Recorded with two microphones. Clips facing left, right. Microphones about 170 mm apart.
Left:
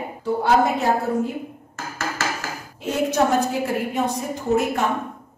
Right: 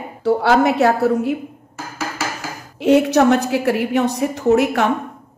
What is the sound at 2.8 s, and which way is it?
A woman's voice, 75° right (ahead or behind).